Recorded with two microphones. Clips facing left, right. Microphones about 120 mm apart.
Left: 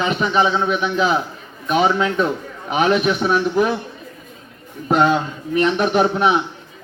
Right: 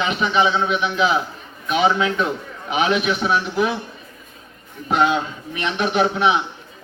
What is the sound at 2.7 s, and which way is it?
A man's voice, 40° left (ahead or behind).